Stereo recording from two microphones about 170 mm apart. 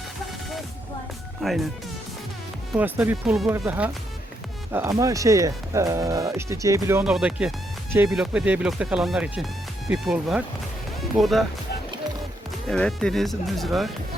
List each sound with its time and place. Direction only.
1.4 s speech: centre (ahead or behind)
2.7 s speech: 10° right (ahead or behind)
7.0 s speech: 5° right (ahead or behind)
12.6 s speech: 5° left (ahead or behind)